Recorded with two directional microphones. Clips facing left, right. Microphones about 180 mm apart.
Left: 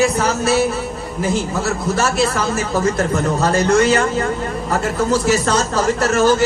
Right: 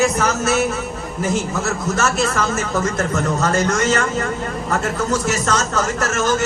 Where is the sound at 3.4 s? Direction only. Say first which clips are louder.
Left 6 dB; 30° left (ahead or behind).